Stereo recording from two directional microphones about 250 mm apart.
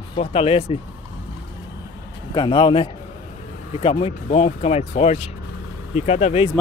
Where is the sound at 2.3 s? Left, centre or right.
Centre.